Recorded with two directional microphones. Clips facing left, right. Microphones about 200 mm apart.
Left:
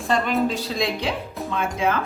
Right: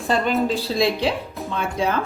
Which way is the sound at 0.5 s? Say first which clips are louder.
Right 4 dB; 30° right (ahead or behind).